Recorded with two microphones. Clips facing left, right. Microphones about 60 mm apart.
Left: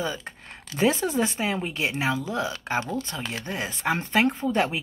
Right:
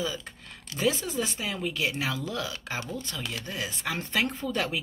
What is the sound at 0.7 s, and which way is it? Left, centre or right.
Speech, left.